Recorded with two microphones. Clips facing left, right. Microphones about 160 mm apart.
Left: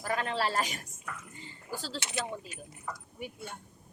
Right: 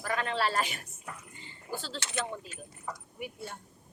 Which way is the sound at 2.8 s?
10° right (ahead or behind).